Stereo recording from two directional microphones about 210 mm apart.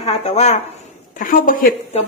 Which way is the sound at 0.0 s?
30° left (ahead or behind).